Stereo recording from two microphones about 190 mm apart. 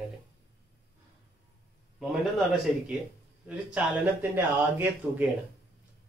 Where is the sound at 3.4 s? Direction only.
5° right (ahead or behind).